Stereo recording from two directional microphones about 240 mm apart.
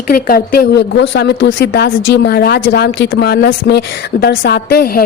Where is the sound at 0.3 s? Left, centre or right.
Left.